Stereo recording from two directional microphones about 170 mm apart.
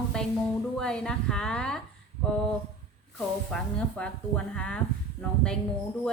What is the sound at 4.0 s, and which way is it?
Speech, 5° left (ahead or behind).